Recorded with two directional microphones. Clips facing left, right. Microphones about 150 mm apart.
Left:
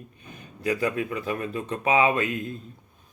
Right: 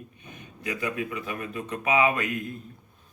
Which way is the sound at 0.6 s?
35° left (ahead or behind).